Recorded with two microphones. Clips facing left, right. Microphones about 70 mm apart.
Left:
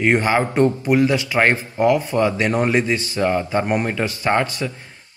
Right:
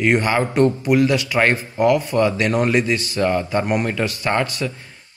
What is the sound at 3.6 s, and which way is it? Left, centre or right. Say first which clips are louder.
A man's voice: even; left.